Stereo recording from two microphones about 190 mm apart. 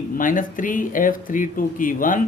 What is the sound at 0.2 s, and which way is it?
Speech, 45° left (ahead or behind).